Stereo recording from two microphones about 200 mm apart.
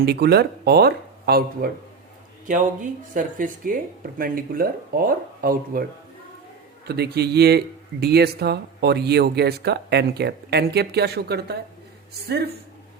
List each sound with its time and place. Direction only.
0.0 s speech: 55° right (ahead or behind)
6.8 s speech: 55° right (ahead or behind)